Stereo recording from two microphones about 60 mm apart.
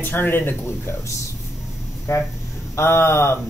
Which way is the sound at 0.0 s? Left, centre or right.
Left.